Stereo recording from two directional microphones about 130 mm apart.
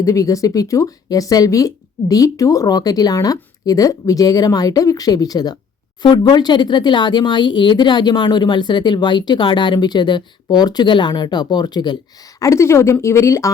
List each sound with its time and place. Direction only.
0.0 s speech: 25° left (ahead or behind)
12.4 s speech: 20° left (ahead or behind)